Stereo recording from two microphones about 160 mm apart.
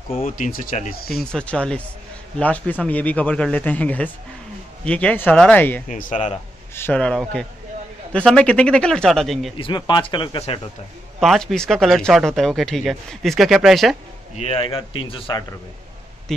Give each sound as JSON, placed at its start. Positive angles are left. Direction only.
{"t": 0.2, "sound": "speech", "side_deg": 55}
{"t": 1.1, "sound": "speech", "side_deg": 5}
{"t": 5.9, "sound": "speech", "side_deg": 55}
{"t": 6.7, "sound": "speech", "side_deg": 10}
{"t": 9.6, "sound": "speech", "side_deg": 30}
{"t": 11.1, "sound": "speech", "side_deg": 0}
{"t": 14.3, "sound": "speech", "side_deg": 40}
{"t": 16.3, "sound": "speech", "side_deg": 5}